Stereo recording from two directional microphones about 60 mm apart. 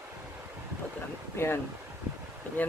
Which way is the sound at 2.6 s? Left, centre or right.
Left.